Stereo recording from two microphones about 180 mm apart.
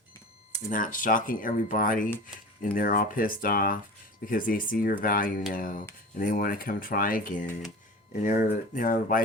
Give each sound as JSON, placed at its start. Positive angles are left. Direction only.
{"t": 0.5, "sound": "speech", "side_deg": 50}